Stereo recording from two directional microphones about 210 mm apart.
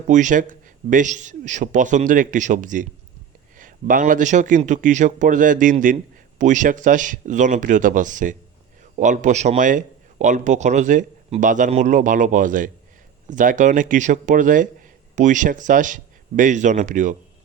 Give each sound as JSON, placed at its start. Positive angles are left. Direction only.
{"t": 0.1, "sound": "a man's voice", "side_deg": -35}